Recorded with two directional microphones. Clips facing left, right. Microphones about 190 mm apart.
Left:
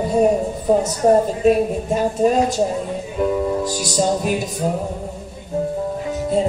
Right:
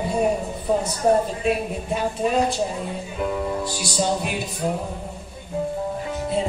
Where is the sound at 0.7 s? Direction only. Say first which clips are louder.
Left 5 dB; 40° left (ahead or behind).